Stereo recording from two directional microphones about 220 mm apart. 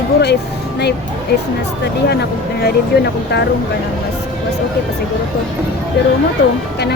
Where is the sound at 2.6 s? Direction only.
50° left (ahead or behind).